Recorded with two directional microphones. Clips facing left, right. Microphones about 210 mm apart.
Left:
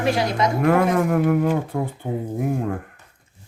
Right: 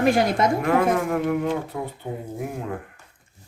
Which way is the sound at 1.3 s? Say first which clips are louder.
Left 4 dB; 50° left (ahead or behind).